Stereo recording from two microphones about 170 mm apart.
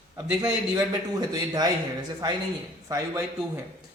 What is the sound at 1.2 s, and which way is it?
Speech, 25° right (ahead or behind).